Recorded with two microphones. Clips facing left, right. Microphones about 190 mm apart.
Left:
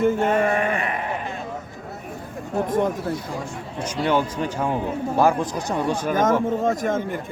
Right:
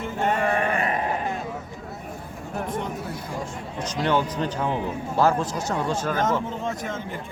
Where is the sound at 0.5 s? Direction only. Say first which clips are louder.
Left 1 dB; 40° right (ahead or behind).